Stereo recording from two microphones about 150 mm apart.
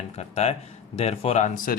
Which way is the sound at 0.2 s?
45° left (ahead or behind).